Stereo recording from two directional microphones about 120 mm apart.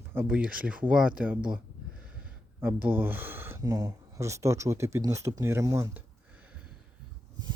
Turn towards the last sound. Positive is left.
turn(degrees=-25)  # may be behind; listen again after turning